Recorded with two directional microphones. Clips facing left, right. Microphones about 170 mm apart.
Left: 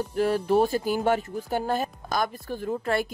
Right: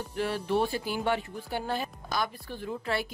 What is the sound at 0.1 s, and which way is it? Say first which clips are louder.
Speech: left 6 dB; 40° left (ahead or behind).